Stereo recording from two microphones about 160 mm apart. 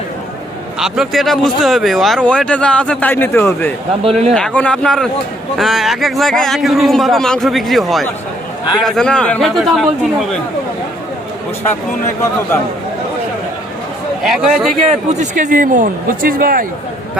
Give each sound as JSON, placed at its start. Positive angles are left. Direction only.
{"t": 0.8, "sound": "a man's voice", "side_deg": 0}
{"t": 14.2, "sound": "a man's voice", "side_deg": 0}
{"t": 14.8, "sound": "a man's voice", "side_deg": -50}